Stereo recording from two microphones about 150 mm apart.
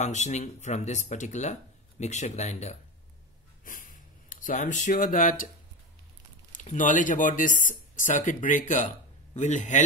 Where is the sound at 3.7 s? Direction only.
65° left (ahead or behind).